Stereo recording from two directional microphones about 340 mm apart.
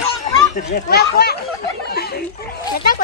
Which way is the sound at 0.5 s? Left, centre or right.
Left.